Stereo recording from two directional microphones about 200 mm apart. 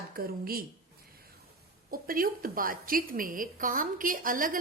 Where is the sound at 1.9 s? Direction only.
45° right (ahead or behind).